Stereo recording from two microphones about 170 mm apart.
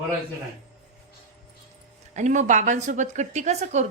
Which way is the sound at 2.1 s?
45° right (ahead or behind).